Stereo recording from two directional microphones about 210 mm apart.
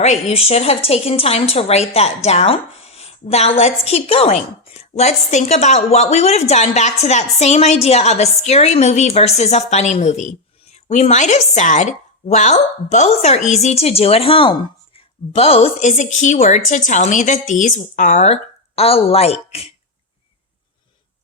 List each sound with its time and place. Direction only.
0.0 s a woman's voice: 30° left (ahead or behind)